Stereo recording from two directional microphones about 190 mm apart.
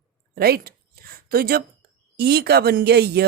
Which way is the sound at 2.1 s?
55° right (ahead or behind).